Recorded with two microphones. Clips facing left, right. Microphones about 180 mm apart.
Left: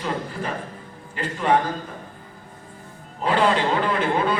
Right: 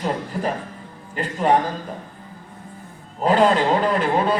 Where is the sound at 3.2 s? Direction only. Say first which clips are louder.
Right 4 dB; 40° right (ahead or behind).